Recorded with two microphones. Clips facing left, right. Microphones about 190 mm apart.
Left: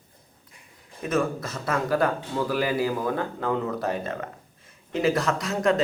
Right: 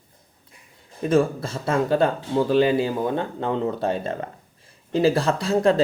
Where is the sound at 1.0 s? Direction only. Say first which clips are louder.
Right 6 dB; 30° right (ahead or behind).